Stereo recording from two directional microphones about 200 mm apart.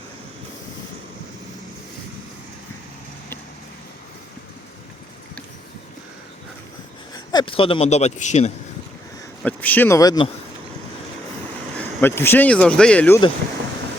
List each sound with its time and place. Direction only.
7.1 s a man's voice: 20° left (ahead or behind)
9.4 s speech: 10° left (ahead or behind)
11.8 s speech: 10° left (ahead or behind)